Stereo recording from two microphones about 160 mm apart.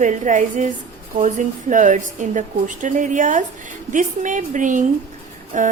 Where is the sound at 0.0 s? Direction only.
50° right (ahead or behind).